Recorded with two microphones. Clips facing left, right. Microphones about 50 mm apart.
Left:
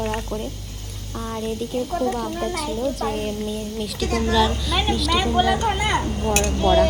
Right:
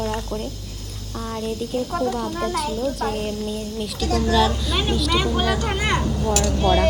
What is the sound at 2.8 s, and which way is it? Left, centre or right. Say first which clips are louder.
Speech: even; centre.